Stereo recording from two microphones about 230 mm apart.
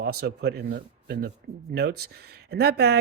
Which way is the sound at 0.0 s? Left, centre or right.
Right.